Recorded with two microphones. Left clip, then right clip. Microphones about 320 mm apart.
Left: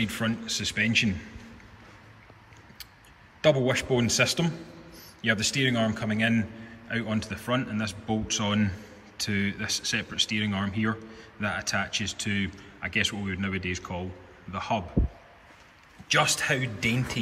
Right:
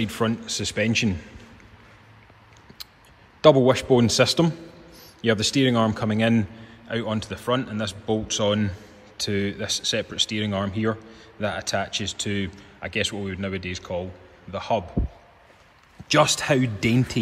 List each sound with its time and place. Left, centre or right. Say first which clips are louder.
0.0 s a man's voice: right 4 dB; centre
3.3 s a man's voice: right 7 dB; centre
16.1 s a man's voice: right 5 dB; centre